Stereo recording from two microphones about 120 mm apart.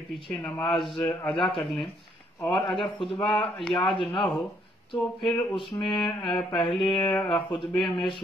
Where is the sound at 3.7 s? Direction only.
45° left (ahead or behind).